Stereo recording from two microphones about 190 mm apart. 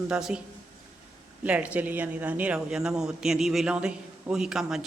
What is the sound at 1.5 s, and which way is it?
Speech, 5° right (ahead or behind).